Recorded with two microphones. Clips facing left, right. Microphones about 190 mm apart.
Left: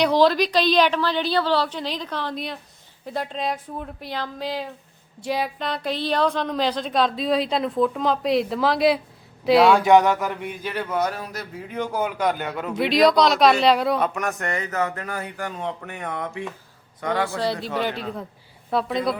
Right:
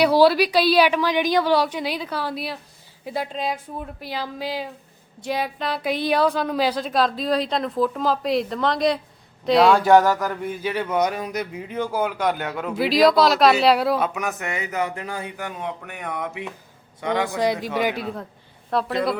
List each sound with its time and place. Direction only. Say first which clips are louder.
0.0 s a woman's voice: right 2 dB; 10° right (ahead or behind)
11.9 s a woman's voice: even; 5° right (ahead or behind)
15.8 s a woman's voice: left 1 dB; centre (ahead or behind)
16.1 s a woman's voice: right 2 dB; 15° right (ahead or behind)